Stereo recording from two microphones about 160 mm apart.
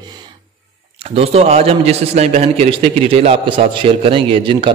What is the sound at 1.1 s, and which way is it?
A man's voice, 40° right (ahead or behind).